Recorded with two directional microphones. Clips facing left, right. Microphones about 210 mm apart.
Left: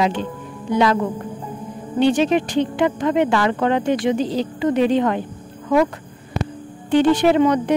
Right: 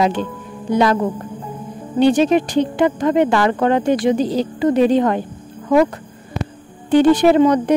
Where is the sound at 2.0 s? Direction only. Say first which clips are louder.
Right 3 dB; 40° right (ahead or behind).